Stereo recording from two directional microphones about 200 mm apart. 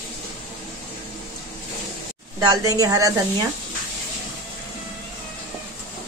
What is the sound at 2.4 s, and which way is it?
Speech, 15° right (ahead or behind).